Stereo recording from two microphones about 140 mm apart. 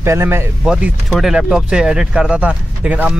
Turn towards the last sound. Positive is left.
turn(degrees=-10)  # may be behind; listen again after turning